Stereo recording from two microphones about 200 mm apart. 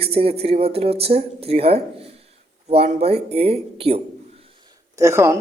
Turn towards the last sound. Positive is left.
turn(degrees=-15)  # may be behind; listen again after turning